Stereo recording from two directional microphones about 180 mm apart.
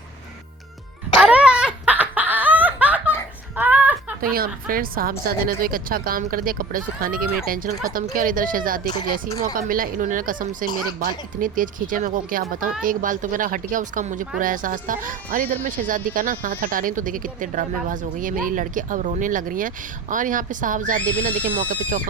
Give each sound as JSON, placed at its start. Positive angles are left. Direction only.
{"t": 1.2, "sound": "laughter", "side_deg": -5}
{"t": 3.5, "sound": "a sound", "side_deg": -10}
{"t": 4.2, "sound": "speech", "side_deg": -55}